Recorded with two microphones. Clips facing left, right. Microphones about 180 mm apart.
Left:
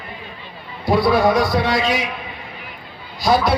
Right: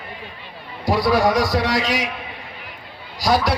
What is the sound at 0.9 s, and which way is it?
A man's voice, 25° left (ahead or behind).